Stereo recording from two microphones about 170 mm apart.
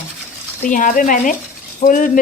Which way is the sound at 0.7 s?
50° left (ahead or behind).